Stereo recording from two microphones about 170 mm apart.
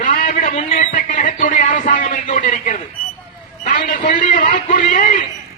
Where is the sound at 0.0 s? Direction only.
50° left (ahead or behind).